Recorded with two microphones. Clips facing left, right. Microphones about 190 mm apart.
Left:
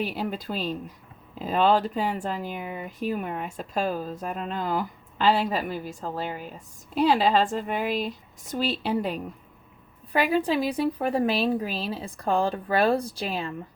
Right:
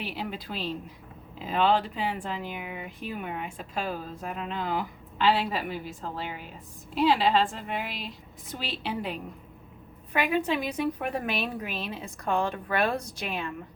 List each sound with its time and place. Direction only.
0.0 s a woman's voice: 45° left (ahead or behind)